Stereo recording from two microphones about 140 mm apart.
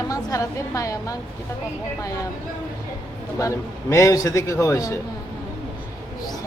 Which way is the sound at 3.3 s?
20° left (ahead or behind).